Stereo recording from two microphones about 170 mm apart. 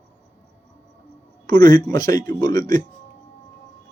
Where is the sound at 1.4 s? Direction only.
25° left (ahead or behind).